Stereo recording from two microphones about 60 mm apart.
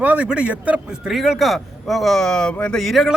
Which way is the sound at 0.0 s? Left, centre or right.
Right.